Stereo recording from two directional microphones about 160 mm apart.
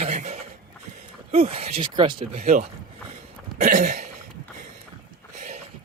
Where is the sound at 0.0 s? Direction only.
45° right (ahead or behind).